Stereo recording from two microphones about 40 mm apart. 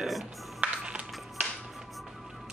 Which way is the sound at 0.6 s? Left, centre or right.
Right.